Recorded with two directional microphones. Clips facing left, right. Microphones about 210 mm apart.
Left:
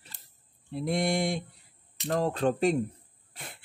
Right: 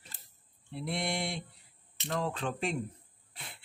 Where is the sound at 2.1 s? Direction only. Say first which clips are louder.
Left 8 dB; 40° left (ahead or behind).